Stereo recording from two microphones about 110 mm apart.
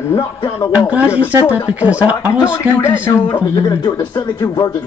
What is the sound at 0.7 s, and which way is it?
Speech, 15° right (ahead or behind).